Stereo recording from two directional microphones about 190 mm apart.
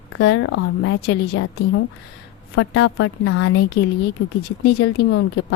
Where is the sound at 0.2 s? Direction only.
80° left.